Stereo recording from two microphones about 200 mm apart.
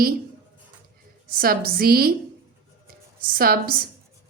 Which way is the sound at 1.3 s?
50° right (ahead or behind).